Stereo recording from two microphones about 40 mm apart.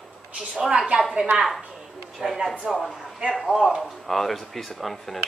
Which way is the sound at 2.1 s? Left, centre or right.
Centre.